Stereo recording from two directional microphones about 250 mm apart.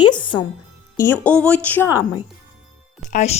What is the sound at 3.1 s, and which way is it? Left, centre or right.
Speech, left.